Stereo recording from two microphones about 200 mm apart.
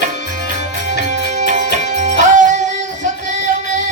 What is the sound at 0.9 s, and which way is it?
Music, 35° right (ahead or behind).